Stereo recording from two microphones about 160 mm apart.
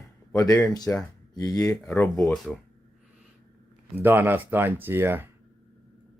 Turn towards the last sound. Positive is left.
turn(degrees=-15)  # may be behind; listen again after turning